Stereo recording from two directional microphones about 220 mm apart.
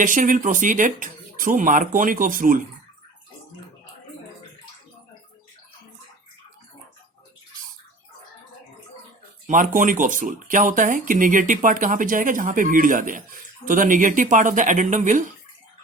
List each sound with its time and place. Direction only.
0.0 s speech: 35° right (ahead or behind)
9.5 s speech: 35° right (ahead or behind)